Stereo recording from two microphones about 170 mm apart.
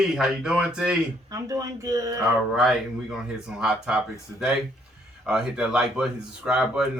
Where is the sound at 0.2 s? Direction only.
5° right (ahead or behind).